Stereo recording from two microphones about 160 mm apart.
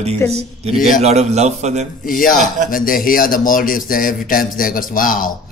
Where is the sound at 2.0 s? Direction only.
60° left (ahead or behind).